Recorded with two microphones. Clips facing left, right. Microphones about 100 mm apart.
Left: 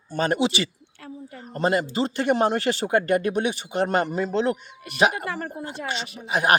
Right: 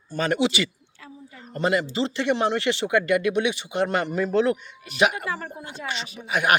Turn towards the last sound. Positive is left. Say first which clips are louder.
# left 1 dB
turn(degrees=35)  # may be behind; listen again after turning